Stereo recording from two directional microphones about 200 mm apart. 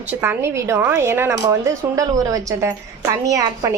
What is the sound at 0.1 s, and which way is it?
Speech, 10° right (ahead or behind).